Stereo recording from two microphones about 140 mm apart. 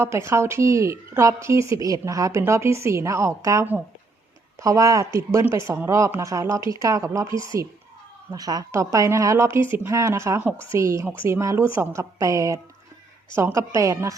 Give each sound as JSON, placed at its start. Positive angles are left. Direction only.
{"t": 0.0, "sound": "a woman's voice", "side_deg": -20}